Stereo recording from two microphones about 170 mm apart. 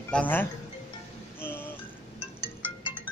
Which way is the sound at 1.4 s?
15° left (ahead or behind).